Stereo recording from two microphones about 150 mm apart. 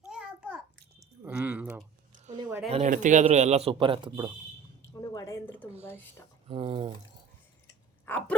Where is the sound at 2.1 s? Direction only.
55° right (ahead or behind).